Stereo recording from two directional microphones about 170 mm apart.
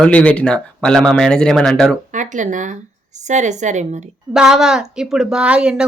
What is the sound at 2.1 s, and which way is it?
Speech, 45° right (ahead or behind).